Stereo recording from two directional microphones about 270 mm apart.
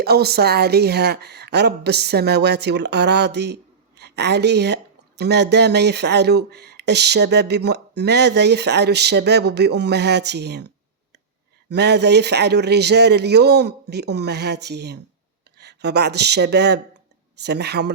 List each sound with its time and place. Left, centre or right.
0.0 s a woman's voice: right
11.7 s a woman's voice: right